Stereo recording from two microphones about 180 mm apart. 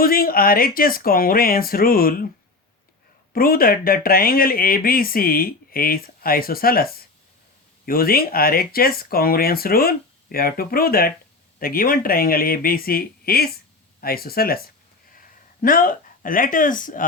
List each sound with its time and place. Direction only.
0.0 s speech: 55° left (ahead or behind)
3.3 s speech: 55° left (ahead or behind)